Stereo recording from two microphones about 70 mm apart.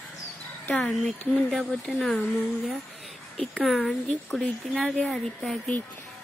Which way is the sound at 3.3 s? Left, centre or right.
Centre.